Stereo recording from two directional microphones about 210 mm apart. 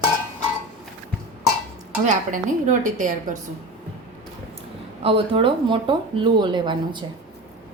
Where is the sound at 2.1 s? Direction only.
35° right (ahead or behind).